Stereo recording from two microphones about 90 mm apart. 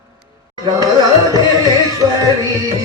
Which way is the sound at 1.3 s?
45° right (ahead or behind).